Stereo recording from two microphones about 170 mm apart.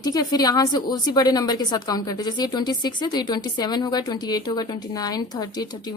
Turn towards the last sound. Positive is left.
turn(degrees=25)  # may be behind; listen again after turning